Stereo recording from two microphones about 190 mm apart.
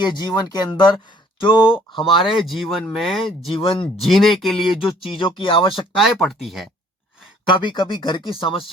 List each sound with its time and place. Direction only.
0.0 s speech: 20° left (ahead or behind)
2.5 s speech: centre (ahead or behind)
3.5 s speech: 30° left (ahead or behind)
3.9 s speech: centre (ahead or behind)
5.1 s speech: 25° left (ahead or behind)
6.0 s speech: centre (ahead or behind)
7.4 s speech: 25° left (ahead or behind)